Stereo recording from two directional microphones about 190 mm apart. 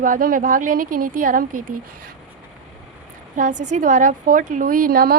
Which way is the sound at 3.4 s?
40° right (ahead or behind).